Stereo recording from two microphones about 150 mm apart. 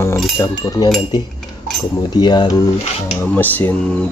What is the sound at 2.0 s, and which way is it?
Speech, 30° left (ahead or behind).